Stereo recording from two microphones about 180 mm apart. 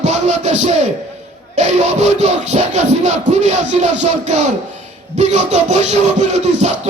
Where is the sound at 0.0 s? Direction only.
40° right (ahead or behind).